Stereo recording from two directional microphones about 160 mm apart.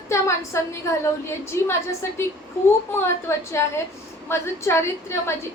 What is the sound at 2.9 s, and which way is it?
A woman's voice, 15° left (ahead or behind).